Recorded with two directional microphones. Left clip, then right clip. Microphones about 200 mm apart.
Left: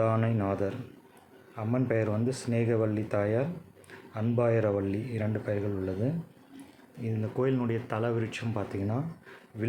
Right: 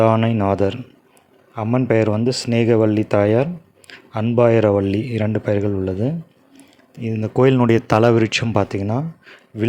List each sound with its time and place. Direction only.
0.0 s speech: 45° right (ahead or behind)